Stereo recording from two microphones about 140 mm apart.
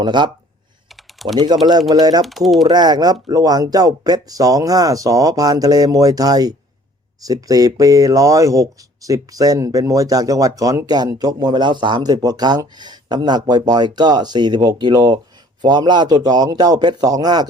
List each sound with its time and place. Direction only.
0.0 s speech: 35° right (ahead or behind)
1.2 s typing: centre (ahead or behind)
1.9 s speech: 30° right (ahead or behind)
2.2 s speech: centre (ahead or behind)
2.6 s speech: 30° right (ahead or behind)